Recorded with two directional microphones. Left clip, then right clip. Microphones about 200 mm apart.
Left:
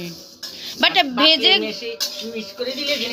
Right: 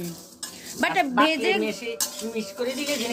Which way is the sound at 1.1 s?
40° right (ahead or behind).